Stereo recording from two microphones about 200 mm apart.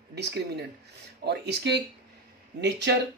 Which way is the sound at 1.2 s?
55° right (ahead or behind).